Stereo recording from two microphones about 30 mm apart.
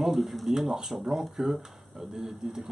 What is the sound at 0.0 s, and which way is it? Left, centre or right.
Speech, centre.